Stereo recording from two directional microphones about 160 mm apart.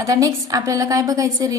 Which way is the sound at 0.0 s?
20° right (ahead or behind).